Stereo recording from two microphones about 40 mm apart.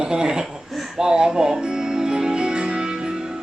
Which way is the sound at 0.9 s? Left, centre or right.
Centre.